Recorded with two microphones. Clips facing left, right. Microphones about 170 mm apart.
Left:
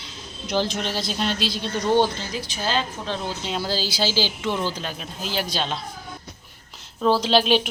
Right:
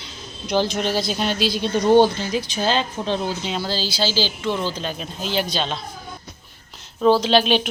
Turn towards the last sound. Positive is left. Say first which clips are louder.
# right 1 dB
turn(degrees=5)  # may be behind; listen again after turning